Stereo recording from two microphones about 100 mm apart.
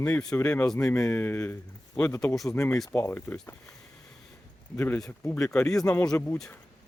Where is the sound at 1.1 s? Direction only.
20° left (ahead or behind); by 2.5 s 5° left (ahead or behind).